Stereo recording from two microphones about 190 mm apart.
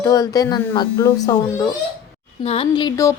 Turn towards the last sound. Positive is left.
turn(degrees=20)  # may be behind; listen again after turning